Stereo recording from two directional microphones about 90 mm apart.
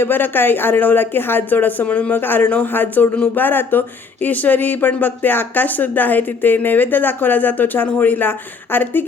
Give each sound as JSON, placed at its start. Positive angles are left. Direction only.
{"t": 0.0, "sound": "speech", "side_deg": 25}